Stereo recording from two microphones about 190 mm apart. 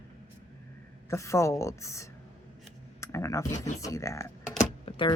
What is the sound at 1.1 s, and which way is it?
Speech, 15° left (ahead or behind).